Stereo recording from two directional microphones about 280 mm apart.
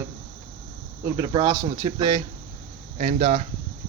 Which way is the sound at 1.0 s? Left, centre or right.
Centre.